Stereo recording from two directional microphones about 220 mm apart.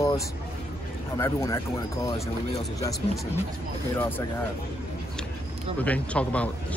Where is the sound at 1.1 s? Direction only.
15° left (ahead or behind).